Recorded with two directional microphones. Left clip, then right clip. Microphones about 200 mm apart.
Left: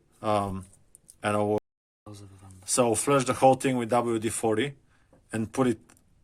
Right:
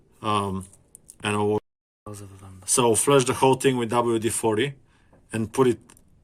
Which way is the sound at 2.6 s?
45° left (ahead or behind).